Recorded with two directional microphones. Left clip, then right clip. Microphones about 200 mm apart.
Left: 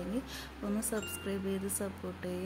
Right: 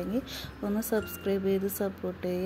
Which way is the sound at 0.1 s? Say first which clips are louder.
Right 5 dB; 20° right (ahead or behind).